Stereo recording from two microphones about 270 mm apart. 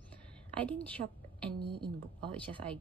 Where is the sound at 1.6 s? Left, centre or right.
Centre.